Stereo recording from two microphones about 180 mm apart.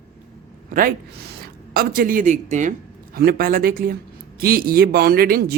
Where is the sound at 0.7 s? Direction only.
55° right (ahead or behind).